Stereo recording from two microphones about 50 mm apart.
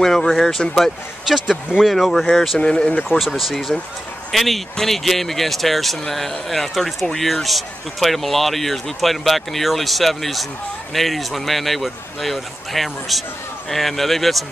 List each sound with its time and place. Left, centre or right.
0.0 s speech: centre
1.2 s speech: centre
1.9 s speech: centre
2.6 s speech: centre
3.1 s speech: centre